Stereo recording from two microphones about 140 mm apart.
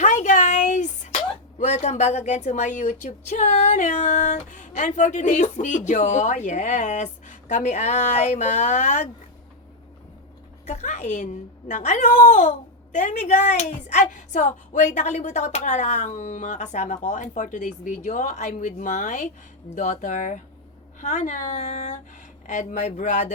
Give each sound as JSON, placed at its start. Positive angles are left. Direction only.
{"t": 0.0, "sound": "a sound", "side_deg": 60}
{"t": 1.5, "sound": "a woman's voice", "side_deg": 55}
{"t": 10.7, "sound": "a woman's voice", "side_deg": 55}